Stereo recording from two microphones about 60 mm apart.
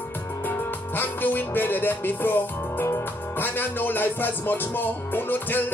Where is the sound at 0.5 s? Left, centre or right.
Left.